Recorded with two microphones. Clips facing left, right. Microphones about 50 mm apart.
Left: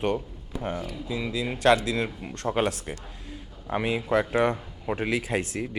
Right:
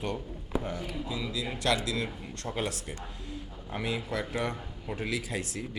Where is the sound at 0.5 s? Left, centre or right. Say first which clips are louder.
Even; centre.